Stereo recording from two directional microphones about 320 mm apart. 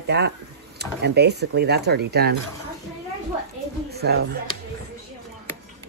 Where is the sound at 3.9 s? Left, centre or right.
Right.